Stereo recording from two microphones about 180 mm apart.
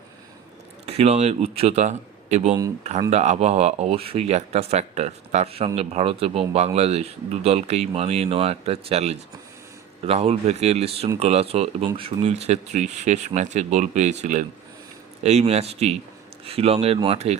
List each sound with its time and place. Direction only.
0.9 s a man's voice: 35° right (ahead or behind)